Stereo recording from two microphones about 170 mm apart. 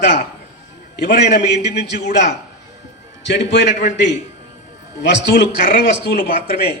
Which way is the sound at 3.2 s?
90° left.